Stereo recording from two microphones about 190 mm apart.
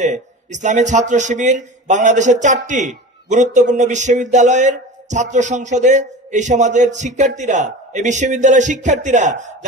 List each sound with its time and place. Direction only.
0.0 s a man's voice: 40° right (ahead or behind)